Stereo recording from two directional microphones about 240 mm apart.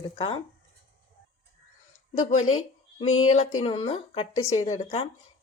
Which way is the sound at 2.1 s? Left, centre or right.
Left.